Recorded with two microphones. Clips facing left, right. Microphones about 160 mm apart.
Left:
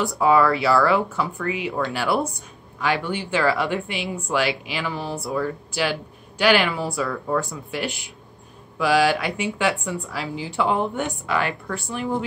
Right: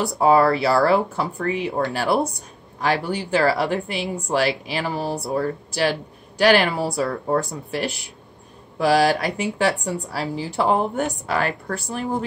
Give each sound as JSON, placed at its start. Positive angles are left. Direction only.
{"t": 0.0, "sound": "speech", "side_deg": -35}